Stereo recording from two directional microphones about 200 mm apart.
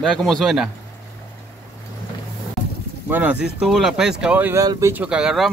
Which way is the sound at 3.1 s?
5° right (ahead or behind).